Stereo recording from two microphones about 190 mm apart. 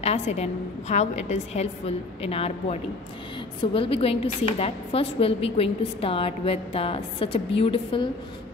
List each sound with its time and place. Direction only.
0.0 s a woman's voice: 35° left (ahead or behind)